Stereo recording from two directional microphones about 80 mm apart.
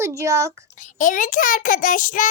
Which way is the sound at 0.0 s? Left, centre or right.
Right.